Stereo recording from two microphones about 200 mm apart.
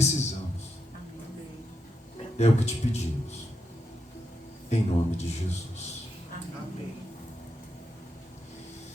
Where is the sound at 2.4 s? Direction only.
35° left (ahead or behind).